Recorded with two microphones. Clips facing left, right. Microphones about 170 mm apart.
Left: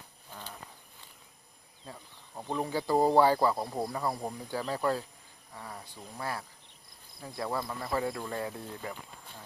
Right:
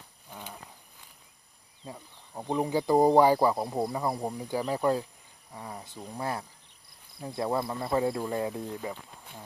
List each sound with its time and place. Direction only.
1.8 s speech: 20° right (ahead or behind)